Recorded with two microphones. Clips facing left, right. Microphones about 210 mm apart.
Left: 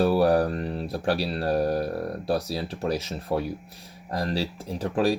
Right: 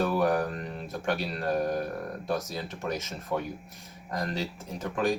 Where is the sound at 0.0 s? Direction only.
30° left (ahead or behind).